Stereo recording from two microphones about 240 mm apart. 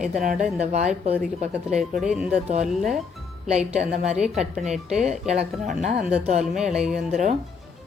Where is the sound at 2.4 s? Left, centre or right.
Right.